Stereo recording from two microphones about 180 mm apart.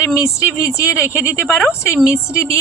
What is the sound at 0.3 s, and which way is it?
A woman's voice, 15° left (ahead or behind).